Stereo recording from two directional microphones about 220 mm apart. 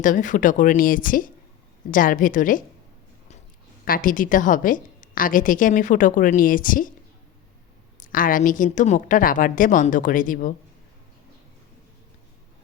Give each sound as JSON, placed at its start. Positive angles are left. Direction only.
{"t": 0.0, "sound": "a woman's voice", "side_deg": 35}
{"t": 3.8, "sound": "a woman's voice", "side_deg": 40}
{"t": 7.9, "sound": "a woman's voice", "side_deg": 40}